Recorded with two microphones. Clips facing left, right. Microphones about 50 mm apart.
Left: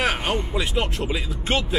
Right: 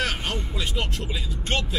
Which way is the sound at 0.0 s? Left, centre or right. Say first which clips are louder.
Left 5 dB; centre.